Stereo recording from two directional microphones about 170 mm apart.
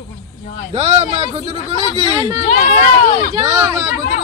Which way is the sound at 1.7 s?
30° left (ahead or behind).